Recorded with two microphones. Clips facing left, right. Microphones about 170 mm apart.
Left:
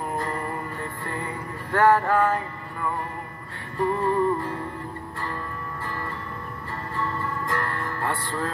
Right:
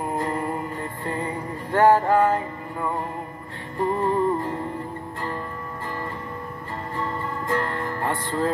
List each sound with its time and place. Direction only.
0.2 s music: 15° right (ahead or behind)
7.0 s music: 15° right (ahead or behind)